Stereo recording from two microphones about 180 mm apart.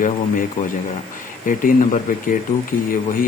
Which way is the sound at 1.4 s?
45° left (ahead or behind).